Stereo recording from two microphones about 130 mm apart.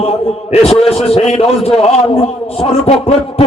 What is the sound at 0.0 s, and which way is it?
A man's voice, 55° left (ahead or behind).